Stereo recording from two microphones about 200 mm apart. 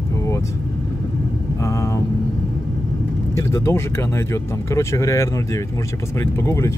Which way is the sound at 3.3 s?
15° left (ahead or behind).